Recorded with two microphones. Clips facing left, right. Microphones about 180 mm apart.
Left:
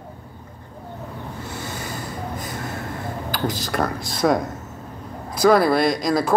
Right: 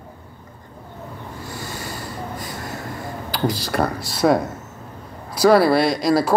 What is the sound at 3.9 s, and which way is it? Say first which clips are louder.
Speech: left 1 dB; 50° left (ahead or behind).